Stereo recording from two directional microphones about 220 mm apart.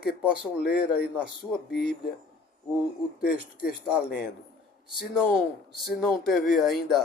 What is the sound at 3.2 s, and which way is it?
Speech, 45° left (ahead or behind).